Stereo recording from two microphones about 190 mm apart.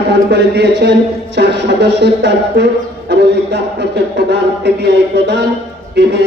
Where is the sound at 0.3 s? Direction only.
65° right (ahead or behind).